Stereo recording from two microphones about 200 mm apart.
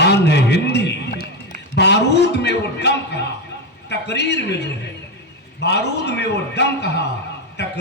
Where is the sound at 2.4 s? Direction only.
55° left (ahead or behind).